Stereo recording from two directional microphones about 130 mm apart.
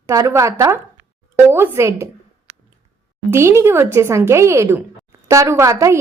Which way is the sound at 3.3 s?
20° right (ahead or behind).